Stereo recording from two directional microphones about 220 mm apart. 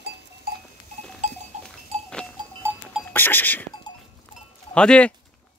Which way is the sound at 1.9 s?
25° right (ahead or behind).